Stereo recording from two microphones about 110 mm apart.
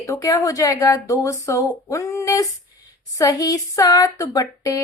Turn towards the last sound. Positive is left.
turn(degrees=35)  # may be behind; listen again after turning